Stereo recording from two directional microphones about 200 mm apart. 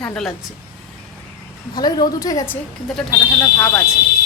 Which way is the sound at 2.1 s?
15° left (ahead or behind).